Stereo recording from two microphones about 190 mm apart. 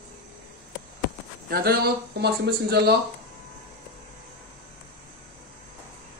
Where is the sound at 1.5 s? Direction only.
55° right (ahead or behind).